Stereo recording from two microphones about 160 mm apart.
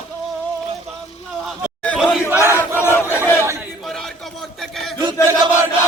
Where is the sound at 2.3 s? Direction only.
15° right (ahead or behind).